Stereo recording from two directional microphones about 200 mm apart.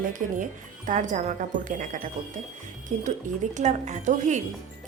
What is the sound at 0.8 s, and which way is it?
Speech, 40° right (ahead or behind).